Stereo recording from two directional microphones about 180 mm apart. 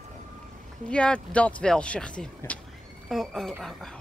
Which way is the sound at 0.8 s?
5° left (ahead or behind).